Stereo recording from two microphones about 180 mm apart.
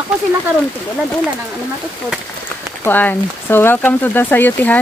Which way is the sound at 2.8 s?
10° left (ahead or behind).